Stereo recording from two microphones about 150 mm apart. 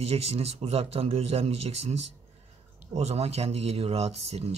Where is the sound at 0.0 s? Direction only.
40° right (ahead or behind).